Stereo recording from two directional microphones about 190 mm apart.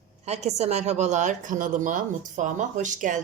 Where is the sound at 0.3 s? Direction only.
35° right (ahead or behind).